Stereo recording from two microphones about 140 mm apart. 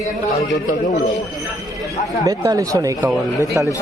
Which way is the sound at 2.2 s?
25° right (ahead or behind).